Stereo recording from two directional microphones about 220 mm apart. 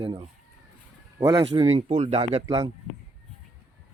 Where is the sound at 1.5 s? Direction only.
30° right (ahead or behind).